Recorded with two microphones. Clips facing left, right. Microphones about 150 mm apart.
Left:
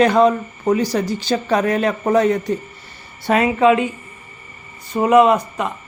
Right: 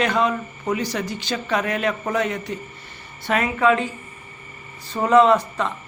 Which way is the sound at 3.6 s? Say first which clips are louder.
Left 4 dB; 20° left (ahead or behind).